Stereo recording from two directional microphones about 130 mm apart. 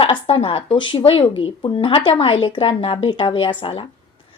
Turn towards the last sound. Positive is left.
turn(degrees=40)  # may be behind; listen again after turning